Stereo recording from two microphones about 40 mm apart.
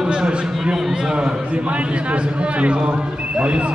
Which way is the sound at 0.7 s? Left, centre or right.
Centre.